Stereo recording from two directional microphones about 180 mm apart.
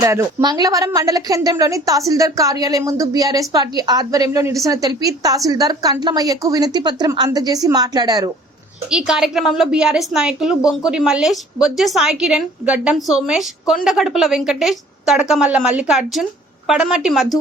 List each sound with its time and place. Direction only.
0.0 s a woman's voice: 15° right (ahead or behind)
8.9 s a woman's voice: 5° right (ahead or behind)